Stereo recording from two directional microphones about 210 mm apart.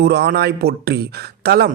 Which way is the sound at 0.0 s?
50° right (ahead or behind).